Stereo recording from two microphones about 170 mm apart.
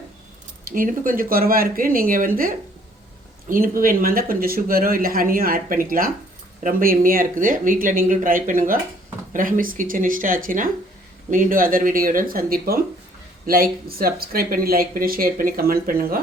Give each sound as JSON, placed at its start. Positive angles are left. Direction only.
{"t": 0.6, "sound": "speech", "side_deg": -55}